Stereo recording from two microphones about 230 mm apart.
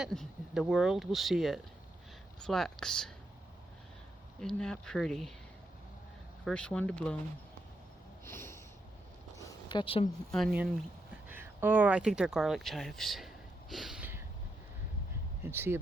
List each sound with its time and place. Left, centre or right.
0.0 s speech: centre
4.4 s speech: centre
6.4 s speech: centre
8.2 s a sound: centre
9.6 s speech: left
10.3 s speech: centre
15.4 s speech: centre